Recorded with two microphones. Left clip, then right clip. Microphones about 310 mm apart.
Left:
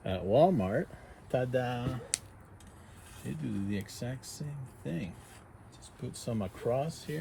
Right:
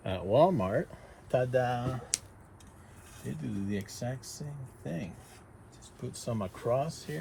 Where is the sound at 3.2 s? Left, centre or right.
Centre.